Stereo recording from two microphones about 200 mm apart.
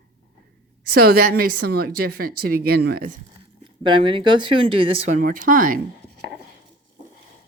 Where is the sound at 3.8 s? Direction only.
25° right (ahead or behind).